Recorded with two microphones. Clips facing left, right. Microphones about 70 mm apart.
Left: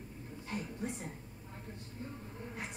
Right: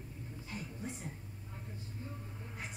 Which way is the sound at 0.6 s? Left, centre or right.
Left.